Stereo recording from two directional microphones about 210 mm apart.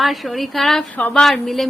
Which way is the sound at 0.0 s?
Centre (ahead or behind).